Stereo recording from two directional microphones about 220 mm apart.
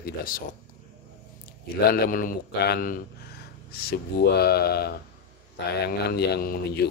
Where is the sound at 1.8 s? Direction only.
40° left (ahead or behind).